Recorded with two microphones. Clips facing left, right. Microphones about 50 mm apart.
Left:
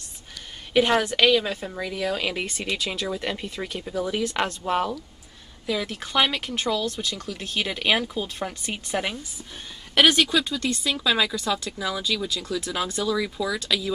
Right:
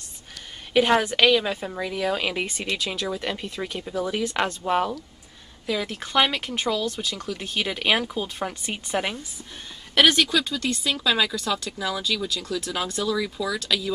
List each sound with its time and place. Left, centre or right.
0.7 s speech: centre
10.0 s speech: centre
10.6 s speech: centre
12.4 s speech: centre
12.9 s speech: centre